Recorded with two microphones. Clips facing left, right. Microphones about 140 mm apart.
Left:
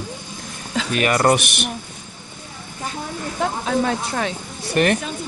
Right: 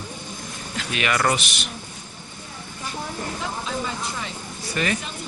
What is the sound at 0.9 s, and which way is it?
Speech, 40° left (ahead or behind).